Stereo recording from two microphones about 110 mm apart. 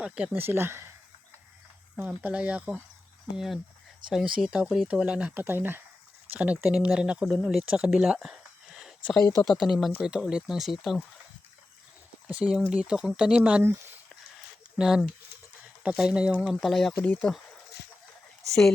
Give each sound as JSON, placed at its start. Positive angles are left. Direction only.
{"t": 0.0, "sound": "speech", "side_deg": -10}
{"t": 2.0, "sound": "speech", "side_deg": -10}
{"t": 12.3, "sound": "speech", "side_deg": -10}
{"t": 14.8, "sound": "speech", "side_deg": -5}
{"t": 17.0, "sound": "speech", "side_deg": 15}